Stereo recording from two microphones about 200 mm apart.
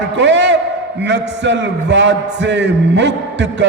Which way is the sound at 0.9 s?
60° right (ahead or behind).